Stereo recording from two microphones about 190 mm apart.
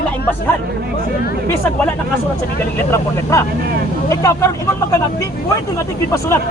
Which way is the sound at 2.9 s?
15° left (ahead or behind).